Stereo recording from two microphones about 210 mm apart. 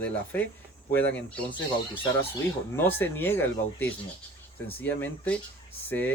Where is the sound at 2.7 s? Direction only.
10° left (ahead or behind).